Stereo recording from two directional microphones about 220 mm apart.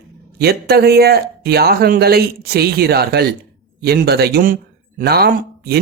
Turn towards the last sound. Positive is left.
turn(degrees=-45)  # may be behind; listen again after turning